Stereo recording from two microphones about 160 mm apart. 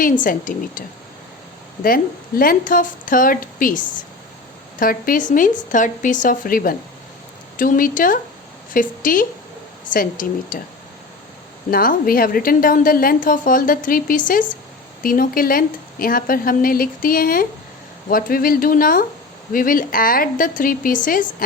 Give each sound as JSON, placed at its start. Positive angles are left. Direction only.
{"t": 0.0, "sound": "a woman's voice", "side_deg": 55}
{"t": 2.4, "sound": "a woman's voice", "side_deg": 60}
{"t": 11.7, "sound": "a woman's voice", "side_deg": 65}